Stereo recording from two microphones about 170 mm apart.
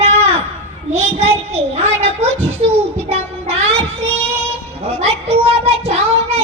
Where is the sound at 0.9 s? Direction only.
40° right (ahead or behind).